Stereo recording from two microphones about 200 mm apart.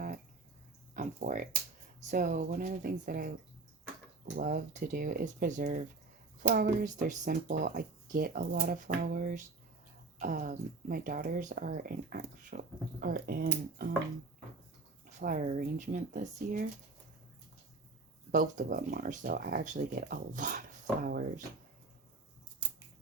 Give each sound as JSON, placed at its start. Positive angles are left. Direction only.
{"t": 0.9, "sound": "a sound", "side_deg": -40}
{"t": 2.0, "sound": "speech", "side_deg": -40}
{"t": 4.4, "sound": "speech", "side_deg": -45}
{"t": 15.2, "sound": "speech", "side_deg": -40}
{"t": 18.3, "sound": "speech", "side_deg": -40}